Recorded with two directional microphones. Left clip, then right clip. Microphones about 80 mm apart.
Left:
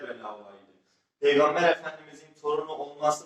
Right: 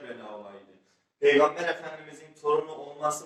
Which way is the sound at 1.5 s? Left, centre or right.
Left.